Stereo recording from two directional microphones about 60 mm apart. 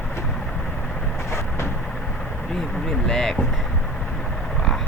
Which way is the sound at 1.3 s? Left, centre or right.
Left.